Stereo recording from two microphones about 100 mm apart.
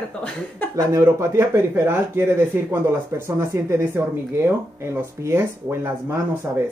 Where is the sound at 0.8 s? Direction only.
30° right (ahead or behind).